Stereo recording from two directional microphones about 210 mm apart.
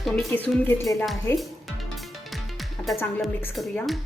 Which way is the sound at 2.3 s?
Centre (ahead or behind).